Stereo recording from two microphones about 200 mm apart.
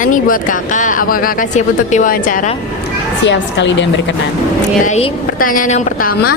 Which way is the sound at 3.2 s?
65° left (ahead or behind).